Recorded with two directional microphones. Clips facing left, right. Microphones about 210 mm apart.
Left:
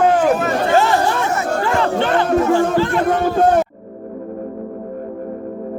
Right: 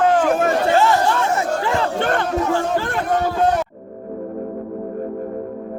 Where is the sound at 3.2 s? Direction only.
50° left (ahead or behind).